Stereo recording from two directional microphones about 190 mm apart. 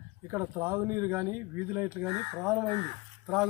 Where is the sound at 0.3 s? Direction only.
15° right (ahead or behind).